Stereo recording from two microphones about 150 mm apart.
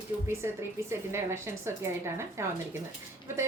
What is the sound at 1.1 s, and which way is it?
Speech, 15° right (ahead or behind).